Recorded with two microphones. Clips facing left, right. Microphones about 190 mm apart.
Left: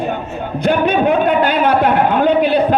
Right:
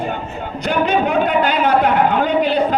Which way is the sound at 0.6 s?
55° left (ahead or behind).